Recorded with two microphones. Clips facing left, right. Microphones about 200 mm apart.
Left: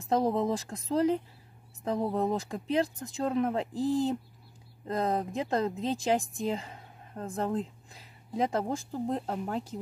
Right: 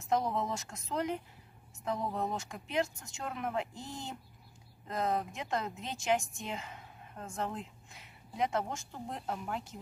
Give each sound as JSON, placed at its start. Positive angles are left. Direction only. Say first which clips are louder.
{"t": 0.0, "sound": "speech", "louder": "left 5 dB", "side_deg": 30}